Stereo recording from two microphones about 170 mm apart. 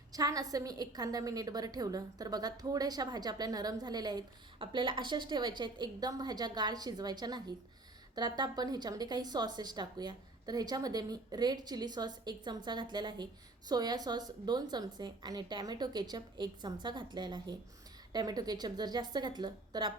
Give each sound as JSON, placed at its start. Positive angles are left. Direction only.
{"t": 0.1, "sound": "a woman's voice", "side_deg": -20}